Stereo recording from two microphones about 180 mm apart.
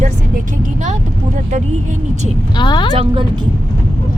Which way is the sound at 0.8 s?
40° right (ahead or behind).